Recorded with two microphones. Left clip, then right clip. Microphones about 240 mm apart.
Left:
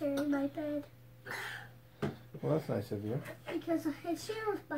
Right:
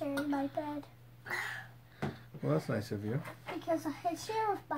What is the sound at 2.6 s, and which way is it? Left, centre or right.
Speech, right.